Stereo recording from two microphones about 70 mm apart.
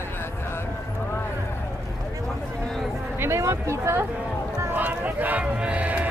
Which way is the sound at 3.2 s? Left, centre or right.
Right.